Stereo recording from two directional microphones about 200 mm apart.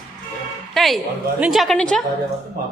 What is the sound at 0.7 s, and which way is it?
A woman's voice, centre (ahead or behind).